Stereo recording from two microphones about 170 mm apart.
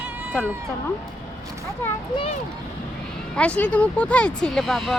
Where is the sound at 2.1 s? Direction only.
30° left (ahead or behind).